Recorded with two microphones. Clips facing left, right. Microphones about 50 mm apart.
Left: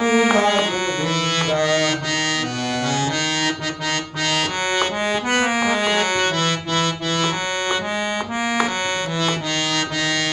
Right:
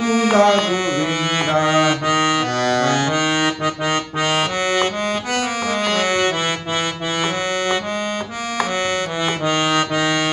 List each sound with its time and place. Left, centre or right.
0.1 s music: left
1.5 s accordion: centre
2.6 s accordion: right
5.3 s music: left
5.7 s accordion: centre
6.4 s accordion: centre